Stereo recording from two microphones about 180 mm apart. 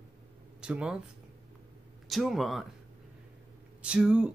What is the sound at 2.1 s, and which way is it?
Speech, centre (ahead or behind).